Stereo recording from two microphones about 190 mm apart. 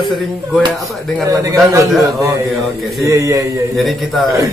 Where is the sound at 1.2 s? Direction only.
15° right (ahead or behind).